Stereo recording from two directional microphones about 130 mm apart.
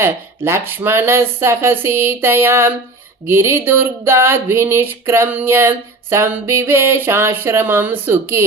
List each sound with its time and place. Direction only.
0.0 s speech: 20° right (ahead or behind)